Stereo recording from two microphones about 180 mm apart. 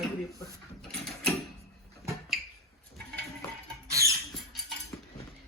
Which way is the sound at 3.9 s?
15° right (ahead or behind).